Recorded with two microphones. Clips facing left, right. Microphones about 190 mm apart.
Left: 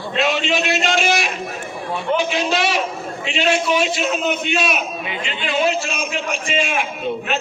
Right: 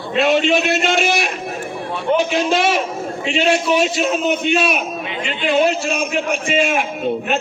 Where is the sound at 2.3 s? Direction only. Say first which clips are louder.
Right 3 dB; 50° right (ahead or behind).